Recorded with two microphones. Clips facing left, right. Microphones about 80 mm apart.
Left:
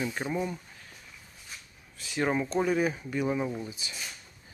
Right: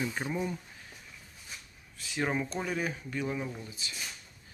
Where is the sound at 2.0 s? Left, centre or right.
Centre; by 3.9 s left.